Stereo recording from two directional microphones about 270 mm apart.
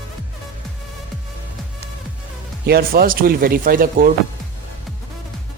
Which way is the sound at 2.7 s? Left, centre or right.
Right.